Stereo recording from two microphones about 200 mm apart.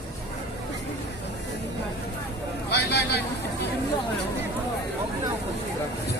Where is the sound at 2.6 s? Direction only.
55° left (ahead or behind).